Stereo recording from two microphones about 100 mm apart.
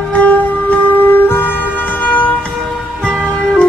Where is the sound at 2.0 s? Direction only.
15° left (ahead or behind).